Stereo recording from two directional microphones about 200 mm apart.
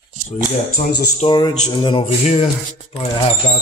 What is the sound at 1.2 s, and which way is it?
Speech, 25° left (ahead or behind).